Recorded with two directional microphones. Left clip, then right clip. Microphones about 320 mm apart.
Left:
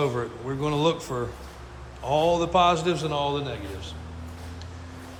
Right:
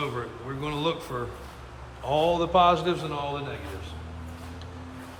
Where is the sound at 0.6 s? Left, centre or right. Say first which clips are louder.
Left 5 dB; centre.